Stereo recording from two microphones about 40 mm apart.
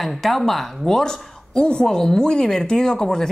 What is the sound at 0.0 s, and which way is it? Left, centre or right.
Speech, centre.